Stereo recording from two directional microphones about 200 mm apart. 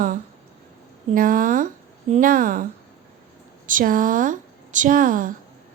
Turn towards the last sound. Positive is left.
turn(degrees=-45)  # may be behind; listen again after turning